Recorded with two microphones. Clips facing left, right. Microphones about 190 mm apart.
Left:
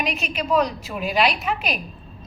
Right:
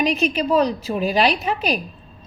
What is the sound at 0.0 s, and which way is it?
A woman's voice, 35° right (ahead or behind).